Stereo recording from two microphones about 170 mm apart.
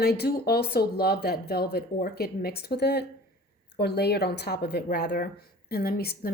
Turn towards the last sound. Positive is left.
turn(degrees=60)  # may be behind; listen again after turning